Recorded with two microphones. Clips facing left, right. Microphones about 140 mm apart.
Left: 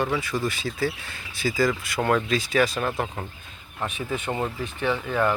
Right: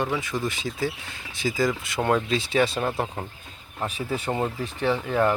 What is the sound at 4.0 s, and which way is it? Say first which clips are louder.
Speech: right 1 dB; 35° right (ahead or behind).